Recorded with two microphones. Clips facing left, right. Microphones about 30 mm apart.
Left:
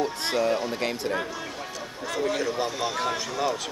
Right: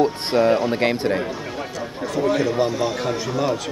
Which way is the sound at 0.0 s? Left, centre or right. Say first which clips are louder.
Right 7 dB; right.